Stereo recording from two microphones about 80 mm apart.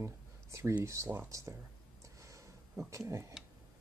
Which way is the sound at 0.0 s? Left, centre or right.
Right.